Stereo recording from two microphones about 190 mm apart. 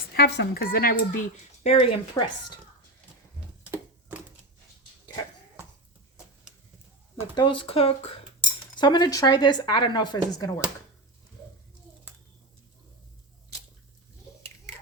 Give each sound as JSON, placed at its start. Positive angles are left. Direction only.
{"t": 0.1, "sound": "speech", "side_deg": 55}
{"t": 1.6, "sound": "speech", "side_deg": 30}
{"t": 7.3, "sound": "speech", "side_deg": 25}